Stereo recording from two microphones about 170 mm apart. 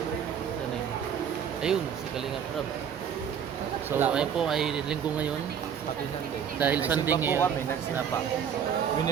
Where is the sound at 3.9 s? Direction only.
10° right (ahead or behind).